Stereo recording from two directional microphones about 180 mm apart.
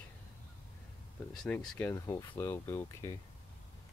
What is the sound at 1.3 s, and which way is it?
Speech, 5° left (ahead or behind).